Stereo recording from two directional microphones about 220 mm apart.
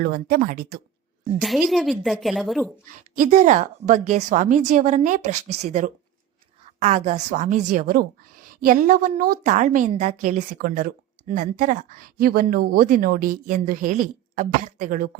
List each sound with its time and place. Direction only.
0.0 s a woman's voice: 40° right (ahead or behind)
1.4 s a woman's voice: centre (ahead or behind)
3.2 s a woman's voice: 35° right (ahead or behind)